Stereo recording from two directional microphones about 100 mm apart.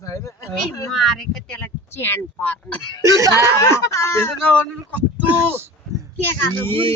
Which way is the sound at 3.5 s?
30° left (ahead or behind).